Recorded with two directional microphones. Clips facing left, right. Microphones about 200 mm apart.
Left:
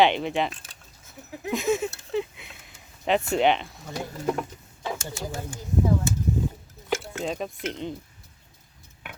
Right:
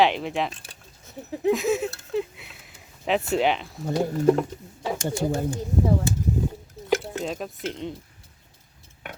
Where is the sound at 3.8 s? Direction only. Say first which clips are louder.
Right 11 dB; 40° right (ahead or behind).